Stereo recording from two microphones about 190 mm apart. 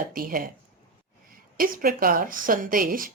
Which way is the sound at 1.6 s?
45° right (ahead or behind).